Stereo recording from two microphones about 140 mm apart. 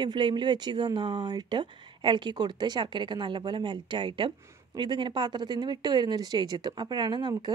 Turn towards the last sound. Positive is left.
turn(degrees=-35)  # may be behind; listen again after turning